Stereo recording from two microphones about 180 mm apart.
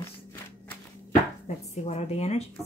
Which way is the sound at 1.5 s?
40° left (ahead or behind).